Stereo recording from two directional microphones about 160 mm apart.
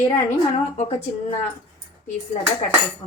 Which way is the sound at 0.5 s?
40° left (ahead or behind).